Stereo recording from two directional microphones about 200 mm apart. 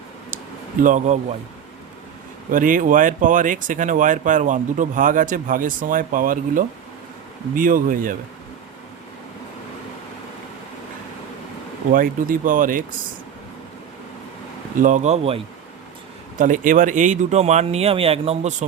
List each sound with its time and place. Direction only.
0.8 s speech: 40° right (ahead or behind)
2.5 s speech: 40° right (ahead or behind)
11.9 s speech: 45° right (ahead or behind)
14.8 s speech: 40° right (ahead or behind)
16.4 s speech: 40° right (ahead or behind)